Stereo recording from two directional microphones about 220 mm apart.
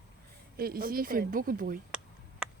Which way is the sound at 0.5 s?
40° right (ahead or behind).